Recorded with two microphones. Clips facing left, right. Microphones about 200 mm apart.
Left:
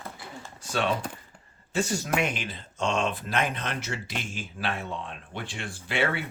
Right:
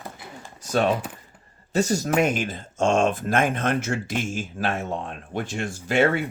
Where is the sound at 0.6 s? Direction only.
40° right (ahead or behind).